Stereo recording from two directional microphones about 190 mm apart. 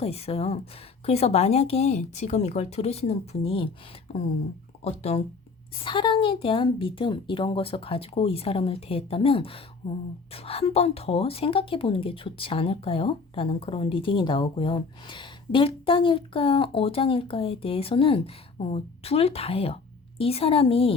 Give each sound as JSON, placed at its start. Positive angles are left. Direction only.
{"t": 0.0, "sound": "a woman's voice", "side_deg": 30}